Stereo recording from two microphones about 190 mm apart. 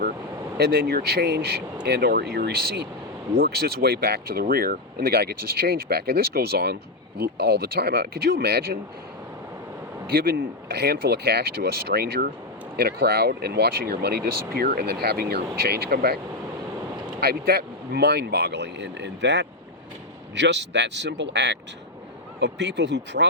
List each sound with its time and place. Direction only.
0.5 s speech: 55° right (ahead or behind)
10.1 s speech: 55° right (ahead or behind)
17.2 s speech: 55° right (ahead or behind)